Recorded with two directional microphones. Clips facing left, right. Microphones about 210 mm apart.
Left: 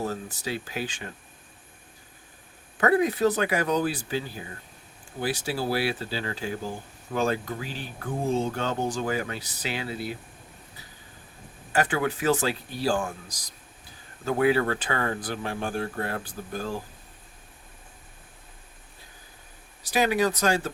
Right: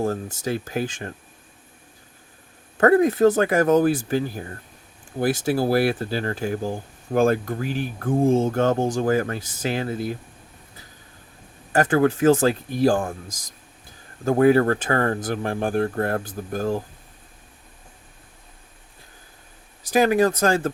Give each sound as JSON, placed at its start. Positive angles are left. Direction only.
{"t": 0.0, "sound": "speech", "side_deg": -50}
{"t": 2.7, "sound": "speech", "side_deg": -50}
{"t": 11.8, "sound": "speech", "side_deg": -50}
{"t": 19.9, "sound": "speech", "side_deg": -45}